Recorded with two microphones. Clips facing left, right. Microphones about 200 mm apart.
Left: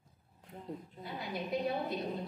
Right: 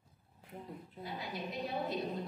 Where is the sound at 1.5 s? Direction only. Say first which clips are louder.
Left 4 dB; 50° left (ahead or behind).